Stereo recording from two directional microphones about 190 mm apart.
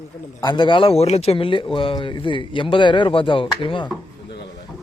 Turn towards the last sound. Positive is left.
turn(degrees=25)  # may be behind; listen again after turning